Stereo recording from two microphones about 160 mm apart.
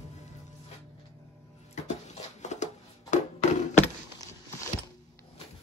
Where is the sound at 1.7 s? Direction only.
45° left (ahead or behind).